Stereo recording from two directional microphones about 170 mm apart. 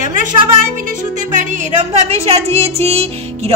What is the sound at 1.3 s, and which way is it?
Speech, 45° right (ahead or behind).